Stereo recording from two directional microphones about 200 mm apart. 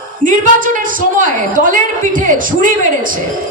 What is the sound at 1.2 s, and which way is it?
A man's voice, 40° right (ahead or behind).